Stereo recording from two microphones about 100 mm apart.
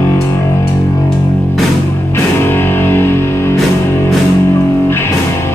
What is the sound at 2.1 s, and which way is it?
Music, 25° left (ahead or behind).